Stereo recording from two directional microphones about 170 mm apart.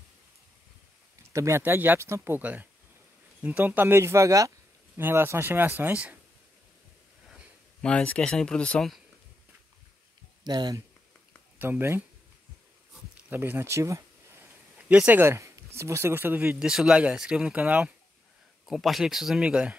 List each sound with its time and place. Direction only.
1.3 s speech: 15° right (ahead or behind)
7.8 s speech: 5° left (ahead or behind)
10.4 s speech: 25° right (ahead or behind)
11.5 s speech: 10° right (ahead or behind)
13.3 s speech: 10° right (ahead or behind)